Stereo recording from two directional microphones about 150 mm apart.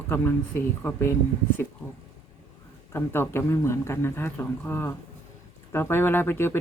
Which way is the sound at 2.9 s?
15° left (ahead or behind).